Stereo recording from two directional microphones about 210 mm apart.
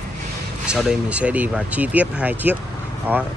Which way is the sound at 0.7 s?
5° right (ahead or behind).